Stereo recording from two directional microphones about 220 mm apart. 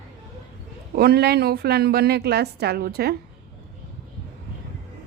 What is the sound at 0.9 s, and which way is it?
A woman's voice, 45° right (ahead or behind).